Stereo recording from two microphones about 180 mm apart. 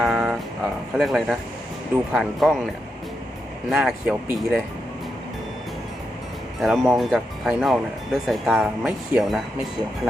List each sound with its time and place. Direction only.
0.0 s a sound: centre (ahead or behind)
0.9 s speech: centre (ahead or behind)
3.7 s speech: centre (ahead or behind)
6.6 s speech: centre (ahead or behind)